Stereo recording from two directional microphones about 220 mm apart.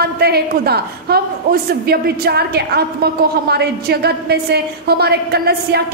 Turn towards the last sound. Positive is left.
turn(degrees=-45)  # may be behind; listen again after turning